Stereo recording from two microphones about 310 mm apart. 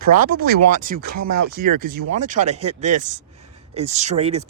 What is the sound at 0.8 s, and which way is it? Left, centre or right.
Speech, right.